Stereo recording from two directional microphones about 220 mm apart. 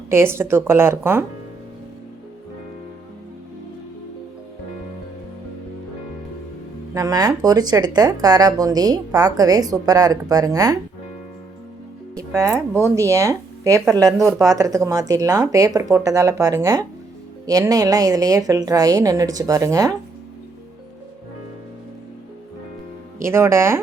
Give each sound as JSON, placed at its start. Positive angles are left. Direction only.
{"t": 0.1, "sound": "speech", "side_deg": -10}
{"t": 6.9, "sound": "speech", "side_deg": -15}
{"t": 12.1, "sound": "speech", "side_deg": -15}
{"t": 23.2, "sound": "speech", "side_deg": -10}